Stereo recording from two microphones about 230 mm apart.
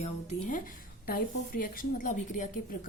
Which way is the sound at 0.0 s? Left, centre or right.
Left.